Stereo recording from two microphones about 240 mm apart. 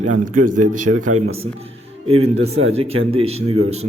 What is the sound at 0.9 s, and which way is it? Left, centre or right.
Speech, right.